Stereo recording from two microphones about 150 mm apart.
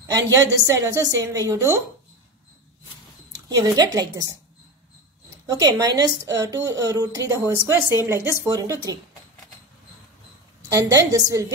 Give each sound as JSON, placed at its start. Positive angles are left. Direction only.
{"t": 0.0, "sound": "a woman's voice", "side_deg": -20}
{"t": 3.4, "sound": "a woman's voice", "side_deg": -25}
{"t": 5.5, "sound": "a woman's voice", "side_deg": -25}
{"t": 10.7, "sound": "a woman's voice", "side_deg": -20}